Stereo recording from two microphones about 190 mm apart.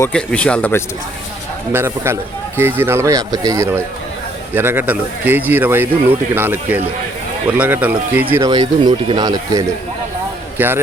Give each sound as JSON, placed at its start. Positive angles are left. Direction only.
{"t": 0.0, "sound": "speech", "side_deg": 5}
{"t": 1.7, "sound": "speech", "side_deg": -15}
{"t": 8.4, "sound": "speech", "side_deg": -20}